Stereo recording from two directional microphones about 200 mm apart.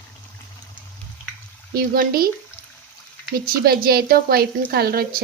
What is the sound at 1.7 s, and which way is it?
Speech, 50° right (ahead or behind).